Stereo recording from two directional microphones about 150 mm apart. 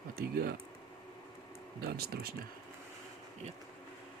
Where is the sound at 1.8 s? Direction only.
90° right.